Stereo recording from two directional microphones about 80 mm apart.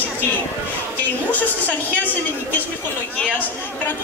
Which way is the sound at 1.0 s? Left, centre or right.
Left.